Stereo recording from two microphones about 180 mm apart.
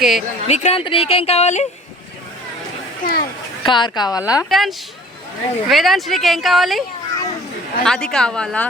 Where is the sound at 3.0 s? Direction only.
50° left (ahead or behind).